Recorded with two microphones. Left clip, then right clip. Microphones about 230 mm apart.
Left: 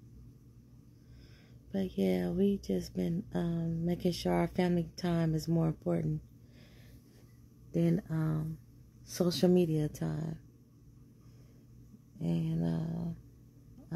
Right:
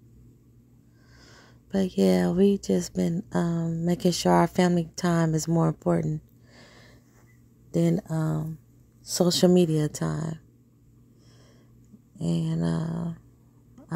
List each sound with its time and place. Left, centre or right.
1.3 s speech: right
12.2 s speech: right